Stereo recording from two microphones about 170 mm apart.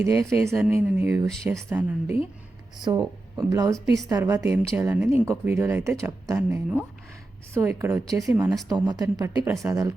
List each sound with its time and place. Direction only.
0.0 s speech: 15° right (ahead or behind)
2.8 s speech: 25° right (ahead or behind)